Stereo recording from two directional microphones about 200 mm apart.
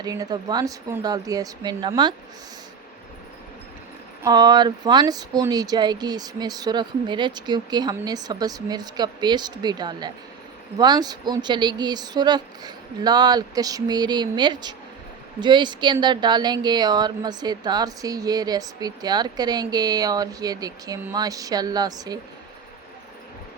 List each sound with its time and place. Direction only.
0.0 s speech: 20° right (ahead or behind)
4.2 s speech: 20° right (ahead or behind)